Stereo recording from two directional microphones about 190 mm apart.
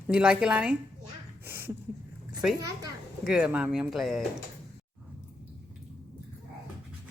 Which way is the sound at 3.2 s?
5° right (ahead or behind).